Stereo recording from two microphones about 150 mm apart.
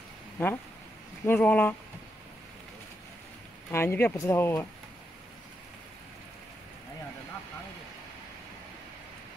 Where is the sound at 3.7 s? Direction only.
15° left (ahead or behind).